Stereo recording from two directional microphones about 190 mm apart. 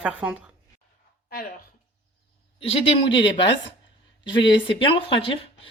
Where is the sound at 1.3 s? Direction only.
50° left (ahead or behind).